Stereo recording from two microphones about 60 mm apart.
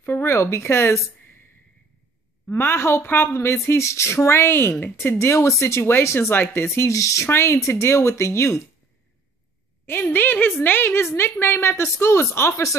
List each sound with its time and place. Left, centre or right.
0.0 s speech: left
2.5 s speech: left
6.9 s speech: left
7.2 s speech: left
9.8 s a woman's voice: left